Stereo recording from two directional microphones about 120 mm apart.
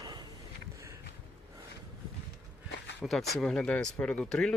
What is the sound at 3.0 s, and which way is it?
Speech, centre (ahead or behind).